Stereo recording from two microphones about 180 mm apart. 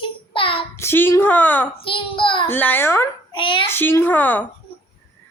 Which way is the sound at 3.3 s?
30° left (ahead or behind).